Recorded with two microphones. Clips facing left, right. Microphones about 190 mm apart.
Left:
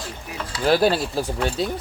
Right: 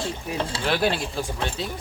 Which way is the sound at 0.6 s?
40° left (ahead or behind).